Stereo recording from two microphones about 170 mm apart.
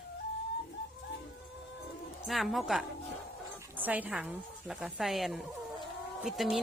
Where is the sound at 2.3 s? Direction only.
Centre (ahead or behind).